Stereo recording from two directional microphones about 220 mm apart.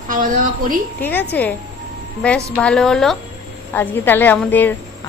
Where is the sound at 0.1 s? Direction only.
40° right (ahead or behind).